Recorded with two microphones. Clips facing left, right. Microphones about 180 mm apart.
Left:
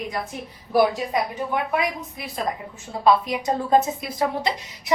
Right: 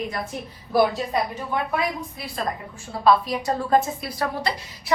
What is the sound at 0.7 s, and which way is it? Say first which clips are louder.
A woman's voice: left 1 dB; 15° left (ahead or behind).